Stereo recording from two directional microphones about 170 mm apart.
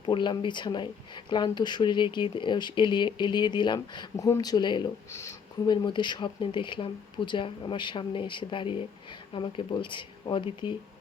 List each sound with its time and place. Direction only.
0.0 s speech: 30° left (ahead or behind)